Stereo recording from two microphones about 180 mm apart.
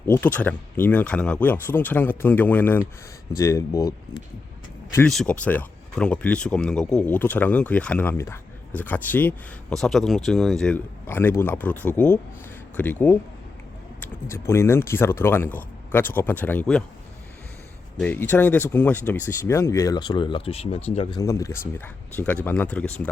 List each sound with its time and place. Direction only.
0.1 s speech: 10° left (ahead or behind)
5.0 s speech: 5° left (ahead or behind)
18.0 s speech: 10° left (ahead or behind); by 21.2 s 30° left (ahead or behind)
21.2 s speech: 15° left (ahead or behind)